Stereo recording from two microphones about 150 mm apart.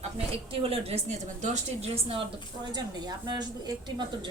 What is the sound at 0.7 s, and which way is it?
A woman's voice, 45° right (ahead or behind).